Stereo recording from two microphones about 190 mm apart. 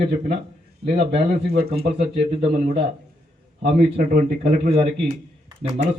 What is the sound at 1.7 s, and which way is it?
Speech, 30° right (ahead or behind).